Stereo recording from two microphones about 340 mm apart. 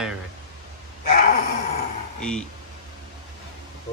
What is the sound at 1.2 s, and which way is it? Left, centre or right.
Dog, left.